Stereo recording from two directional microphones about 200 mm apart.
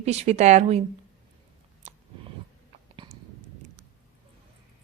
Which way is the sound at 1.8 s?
35° right (ahead or behind).